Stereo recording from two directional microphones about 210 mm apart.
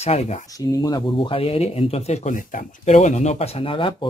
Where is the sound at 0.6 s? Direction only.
15° left (ahead or behind).